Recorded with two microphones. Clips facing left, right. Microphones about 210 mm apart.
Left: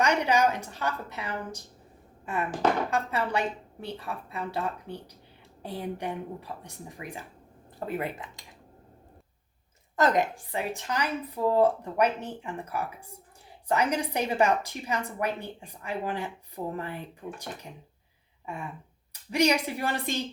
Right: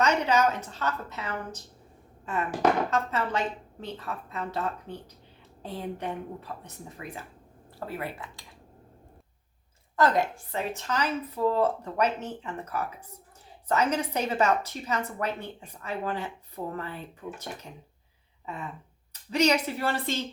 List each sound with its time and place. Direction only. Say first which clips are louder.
0.0 s a woman's voice: even; 15° left (ahead or behind)
2.9 s a woman's voice: even; 15° left (ahead or behind)
9.9 s a woman's voice: even; 20° left (ahead or behind)
19.3 s a woman's voice: even; 15° left (ahead or behind)